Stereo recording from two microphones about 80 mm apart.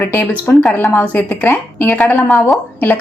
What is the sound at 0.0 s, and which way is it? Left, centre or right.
A woman's voice, left.